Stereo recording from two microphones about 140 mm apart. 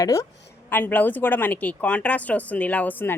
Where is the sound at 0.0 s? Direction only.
25° left (ahead or behind).